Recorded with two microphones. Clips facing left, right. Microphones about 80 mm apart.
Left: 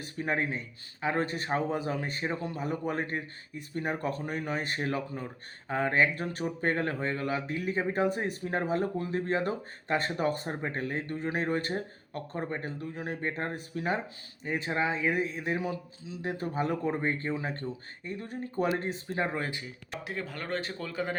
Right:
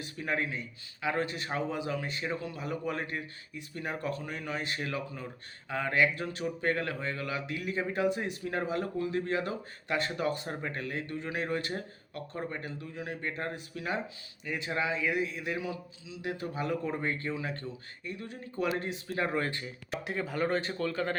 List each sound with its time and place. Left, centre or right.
0.0 s speech: left
12.8 s speech: left
18.7 s speech: left
19.6 s speech: centre